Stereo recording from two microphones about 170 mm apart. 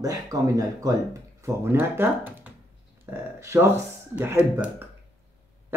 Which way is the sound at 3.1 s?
15° right (ahead or behind).